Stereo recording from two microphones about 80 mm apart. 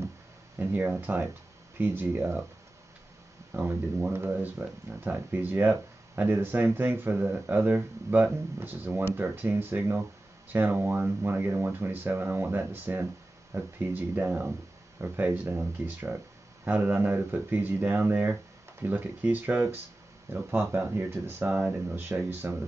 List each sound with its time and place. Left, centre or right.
0.6 s speech: right
3.5 s speech: right
21.5 s speech: centre
21.8 s speech: right